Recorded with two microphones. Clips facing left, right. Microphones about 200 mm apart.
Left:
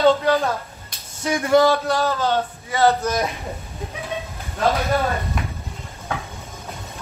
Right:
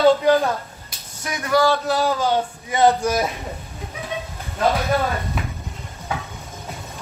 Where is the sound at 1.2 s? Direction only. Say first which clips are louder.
Left 3 dB; 25° left (ahead or behind).